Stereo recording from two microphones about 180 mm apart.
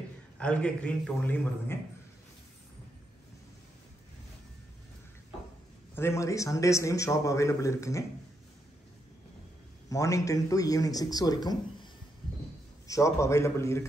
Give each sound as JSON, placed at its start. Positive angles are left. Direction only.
{"t": 0.4, "sound": "a man's voice", "side_deg": 5}
{"t": 5.9, "sound": "a man's voice", "side_deg": 15}
{"t": 9.8, "sound": "a man's voice", "side_deg": 20}